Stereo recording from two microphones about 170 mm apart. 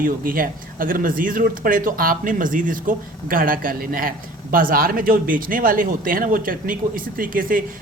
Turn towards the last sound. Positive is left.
turn(degrees=-55)  # may be behind; listen again after turning